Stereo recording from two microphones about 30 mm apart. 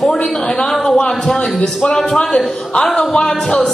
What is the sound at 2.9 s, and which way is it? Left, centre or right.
Speech, left.